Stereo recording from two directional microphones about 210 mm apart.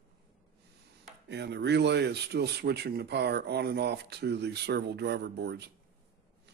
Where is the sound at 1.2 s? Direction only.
55° right (ahead or behind).